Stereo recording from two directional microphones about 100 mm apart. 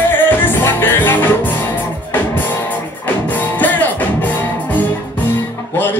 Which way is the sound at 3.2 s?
15° left (ahead or behind).